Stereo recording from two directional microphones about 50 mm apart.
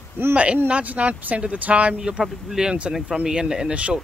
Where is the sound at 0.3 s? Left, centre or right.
Right.